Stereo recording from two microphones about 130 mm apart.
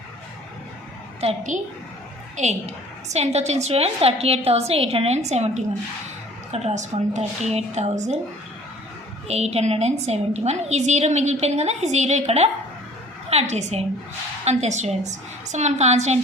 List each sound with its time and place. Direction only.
1.2 s a woman's voice: 50° right (ahead or behind)
2.3 s a woman's voice: 60° right (ahead or behind)
9.2 s a woman's voice: 55° right (ahead or behind)